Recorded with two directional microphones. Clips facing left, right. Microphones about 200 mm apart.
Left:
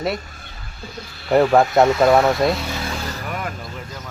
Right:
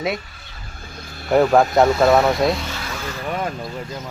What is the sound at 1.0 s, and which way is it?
Speech, 50° right (ahead or behind).